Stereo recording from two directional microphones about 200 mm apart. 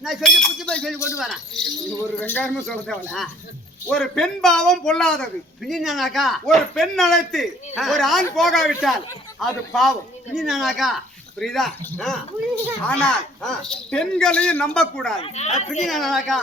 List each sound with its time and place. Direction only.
0.0 s speech: centre (ahead or behind)
15.2 s speech: 35° left (ahead or behind)
15.9 s speech: centre (ahead or behind)